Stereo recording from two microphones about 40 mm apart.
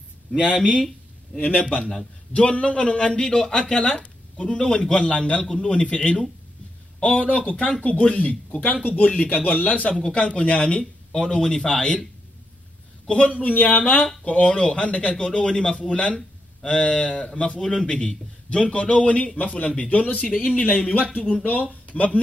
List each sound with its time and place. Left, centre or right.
1.6 s speech: left
5.4 s speech: centre; by 9.9 s left
9.9 s speech: left
13.0 s a man's voice: left
13.4 s speech: left
17.6 s speech: centre; by 20.8 s left
21.2 s speech: centre
21.5 s speech: left